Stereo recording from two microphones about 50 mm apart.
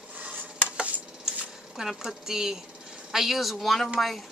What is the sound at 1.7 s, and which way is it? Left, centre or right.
Speech, centre.